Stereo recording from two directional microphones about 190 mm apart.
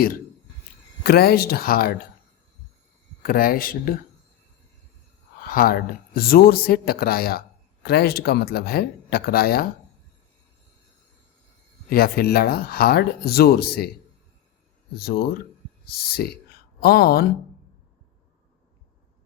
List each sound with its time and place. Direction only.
1.0 s speech: 55° left (ahead or behind)
3.2 s speech: 50° left (ahead or behind)
5.5 s speech: 50° left (ahead or behind)
11.9 s speech: 55° left (ahead or behind)
14.9 s speech: 55° left (ahead or behind)